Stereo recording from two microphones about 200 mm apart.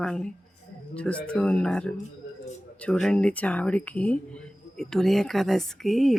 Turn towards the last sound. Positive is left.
turn(degrees=0)  # may be behind; listen again after turning